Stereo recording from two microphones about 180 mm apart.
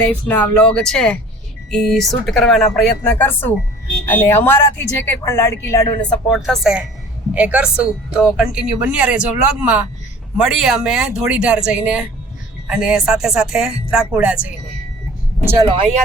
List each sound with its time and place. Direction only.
0.1 s speech: 10° left (ahead or behind)
6.3 s speech: centre (ahead or behind)
15.6 s speech: 30° right (ahead or behind)